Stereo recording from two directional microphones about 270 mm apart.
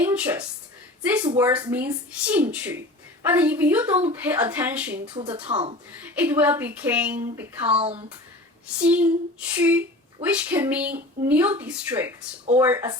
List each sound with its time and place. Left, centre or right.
0.0 s a sound: centre
1.4 s speech: centre
5.1 s speech: centre
6.0 s speech: centre
7.8 s speech: right
8.6 s speech: centre